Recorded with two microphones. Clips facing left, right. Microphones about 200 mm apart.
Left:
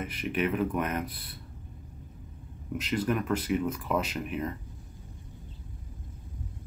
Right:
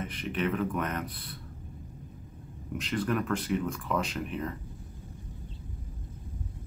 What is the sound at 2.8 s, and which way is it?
Speech, 5° left (ahead or behind).